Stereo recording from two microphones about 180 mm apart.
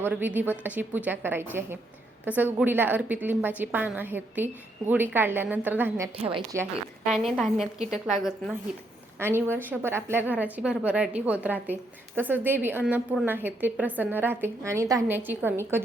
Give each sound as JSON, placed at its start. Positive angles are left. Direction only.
{"t": 0.0, "sound": "a woman's voice", "side_deg": -10}
{"t": 6.1, "sound": "a woman's voice", "side_deg": -30}
{"t": 7.1, "sound": "a woman's voice", "side_deg": 0}
{"t": 9.1, "sound": "a woman's voice", "side_deg": -15}